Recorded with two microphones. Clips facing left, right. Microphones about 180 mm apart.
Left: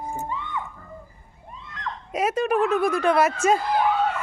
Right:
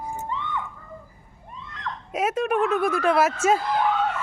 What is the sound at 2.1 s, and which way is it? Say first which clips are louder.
Speech: left 1 dB; centre (ahead or behind).